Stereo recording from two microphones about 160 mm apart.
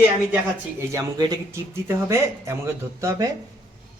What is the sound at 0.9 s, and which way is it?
Speech, 20° right (ahead or behind).